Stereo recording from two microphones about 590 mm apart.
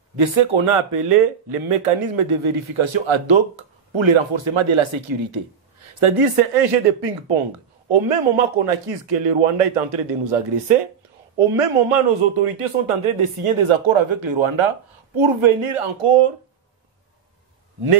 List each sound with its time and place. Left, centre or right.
0.1 s speech: right